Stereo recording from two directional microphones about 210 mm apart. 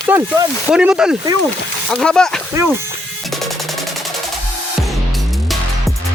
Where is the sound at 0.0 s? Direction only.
15° right (ahead or behind).